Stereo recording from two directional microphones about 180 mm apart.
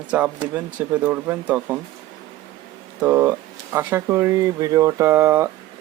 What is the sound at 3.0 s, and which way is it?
Speech, 10° right (ahead or behind).